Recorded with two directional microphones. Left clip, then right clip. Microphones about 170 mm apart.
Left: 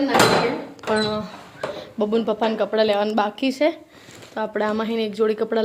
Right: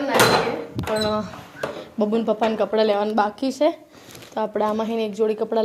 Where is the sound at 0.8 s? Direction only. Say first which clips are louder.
Left 5 dB; 25° right (ahead or behind).